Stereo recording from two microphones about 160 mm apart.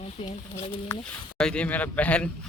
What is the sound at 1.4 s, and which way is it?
Speech, 5° left (ahead or behind).